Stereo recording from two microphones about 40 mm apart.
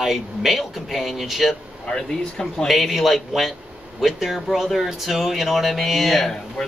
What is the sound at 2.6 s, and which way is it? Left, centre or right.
Speech, centre.